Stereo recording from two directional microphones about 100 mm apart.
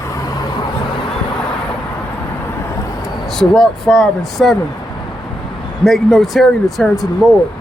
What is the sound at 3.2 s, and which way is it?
Speech, 5° left (ahead or behind).